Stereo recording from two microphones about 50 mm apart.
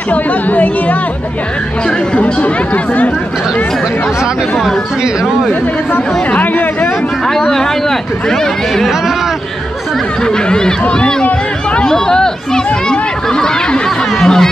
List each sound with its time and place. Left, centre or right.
0.1 s speech: left
2.1 s speech: left
6.3 s speech: left
7.3 s speech: centre
10.2 s speech: centre